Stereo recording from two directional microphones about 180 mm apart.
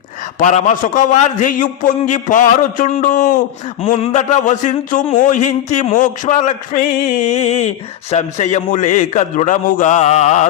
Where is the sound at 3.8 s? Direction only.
30° left (ahead or behind).